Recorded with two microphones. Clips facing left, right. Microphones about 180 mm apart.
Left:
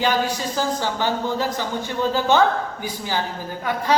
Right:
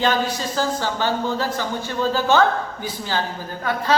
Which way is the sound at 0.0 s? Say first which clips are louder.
Even; 10° left (ahead or behind).